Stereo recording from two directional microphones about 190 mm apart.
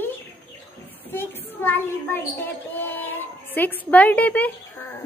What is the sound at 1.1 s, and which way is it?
Child singing, 10° left (ahead or behind).